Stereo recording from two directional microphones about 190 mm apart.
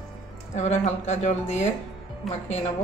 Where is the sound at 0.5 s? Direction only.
35° left (ahead or behind).